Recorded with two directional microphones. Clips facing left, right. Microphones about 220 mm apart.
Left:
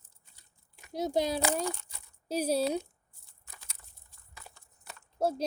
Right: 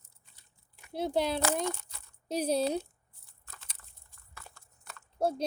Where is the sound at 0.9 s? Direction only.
10° left (ahead or behind).